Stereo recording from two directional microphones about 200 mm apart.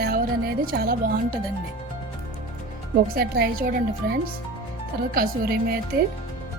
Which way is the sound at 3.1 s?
50° right (ahead or behind).